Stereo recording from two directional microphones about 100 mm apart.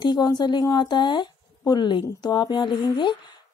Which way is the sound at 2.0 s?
45° left (ahead or behind).